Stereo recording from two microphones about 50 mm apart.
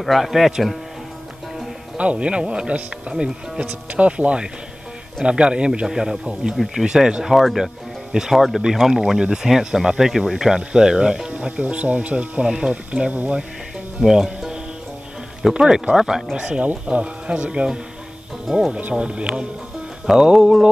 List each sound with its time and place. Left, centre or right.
0.0 s speech: centre
2.0 s a man's voice: right
6.5 s speech: centre
6.8 s speech: centre
11.3 s a man's voice: right
12.4 s speech: centre
13.1 s speech: right
14.0 s speech: centre
16.3 s a man's voice: centre
18.8 s speech: right
19.0 s a man's voice: right